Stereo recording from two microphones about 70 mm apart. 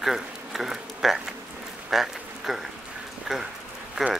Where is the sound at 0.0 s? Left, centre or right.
Centre.